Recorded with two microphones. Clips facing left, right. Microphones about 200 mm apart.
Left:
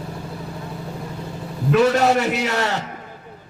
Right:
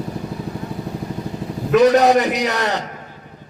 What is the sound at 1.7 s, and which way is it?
A man's voice, 15° right (ahead or behind).